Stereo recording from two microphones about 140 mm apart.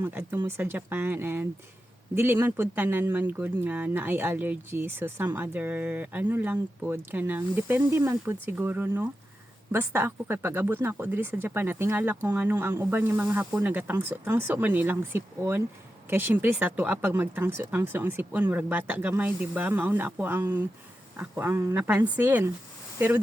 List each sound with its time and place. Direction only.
0.0 s speech: 15° right (ahead or behind)